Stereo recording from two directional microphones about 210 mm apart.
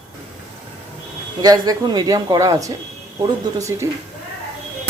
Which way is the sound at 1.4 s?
20° right (ahead or behind).